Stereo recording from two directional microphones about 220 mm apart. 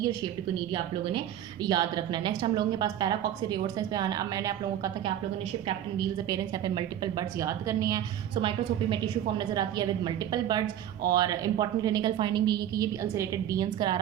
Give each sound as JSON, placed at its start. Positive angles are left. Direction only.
{"t": 0.0, "sound": "a woman's voice", "side_deg": -20}